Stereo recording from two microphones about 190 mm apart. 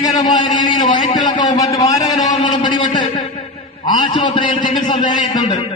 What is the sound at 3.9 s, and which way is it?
A man's voice, 25° left (ahead or behind).